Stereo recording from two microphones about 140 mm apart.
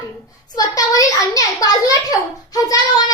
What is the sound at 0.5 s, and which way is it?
A child's voice, 30° left (ahead or behind).